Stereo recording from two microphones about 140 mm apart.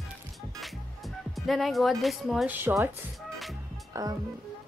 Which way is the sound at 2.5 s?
15° right (ahead or behind).